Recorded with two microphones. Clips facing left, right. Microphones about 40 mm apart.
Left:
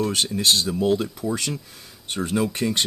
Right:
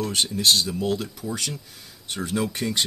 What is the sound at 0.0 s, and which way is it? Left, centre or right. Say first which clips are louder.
Speech: left 1 dB; left.